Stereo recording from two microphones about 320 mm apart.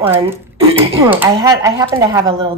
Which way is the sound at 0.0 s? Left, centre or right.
Centre.